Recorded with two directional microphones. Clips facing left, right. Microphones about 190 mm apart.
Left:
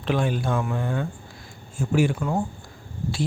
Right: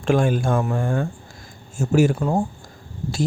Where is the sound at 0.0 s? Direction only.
45° right (ahead or behind).